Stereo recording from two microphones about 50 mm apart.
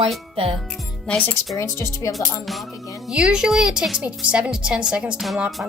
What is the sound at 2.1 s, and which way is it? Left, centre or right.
Speech, centre.